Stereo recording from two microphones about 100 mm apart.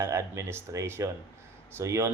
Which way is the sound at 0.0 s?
30° right (ahead or behind).